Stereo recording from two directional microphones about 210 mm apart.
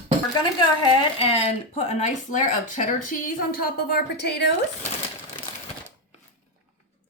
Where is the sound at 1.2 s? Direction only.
30° left (ahead or behind); by 4.5 s 55° left (ahead or behind).